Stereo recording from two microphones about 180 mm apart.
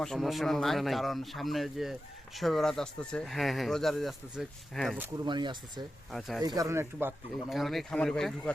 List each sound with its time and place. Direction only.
0.0 s speech: centre (ahead or behind)
4.9 s speech: 20° right (ahead or behind)
6.1 s speech: centre (ahead or behind)
6.4 s speech: 20° right (ahead or behind)
7.5 s speech: centre (ahead or behind)